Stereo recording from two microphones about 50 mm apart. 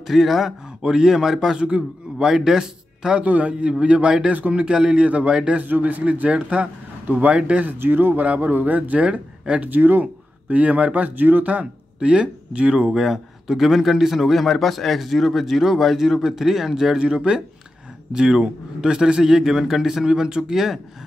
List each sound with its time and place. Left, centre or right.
0.0 s a man's voice: centre
1.6 s a man's voice: right
3.2 s speech: right
5.6 s speech: right
7.3 s speech: right
7.6 s speech: right; by 13.0 s centre
13.0 s a man's voice: centre